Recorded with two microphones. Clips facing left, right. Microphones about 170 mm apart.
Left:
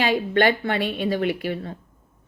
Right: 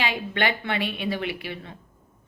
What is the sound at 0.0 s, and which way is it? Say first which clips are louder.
Speech: left 7 dB; 45° left (ahead or behind).